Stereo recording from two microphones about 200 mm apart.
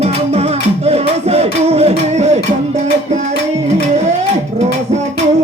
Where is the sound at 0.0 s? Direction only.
30° right (ahead or behind).